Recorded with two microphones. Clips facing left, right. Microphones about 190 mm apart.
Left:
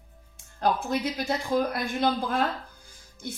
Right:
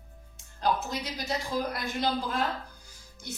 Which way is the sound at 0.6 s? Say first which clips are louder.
Left 4 dB; 55° left (ahead or behind).